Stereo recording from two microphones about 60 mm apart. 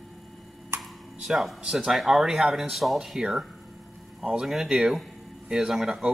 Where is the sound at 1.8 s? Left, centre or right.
Centre.